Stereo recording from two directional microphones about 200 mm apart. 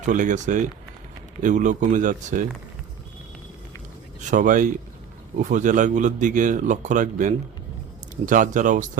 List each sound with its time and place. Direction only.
0.0 s speech: 40° right (ahead or behind)
4.2 s speech: 40° right (ahead or behind)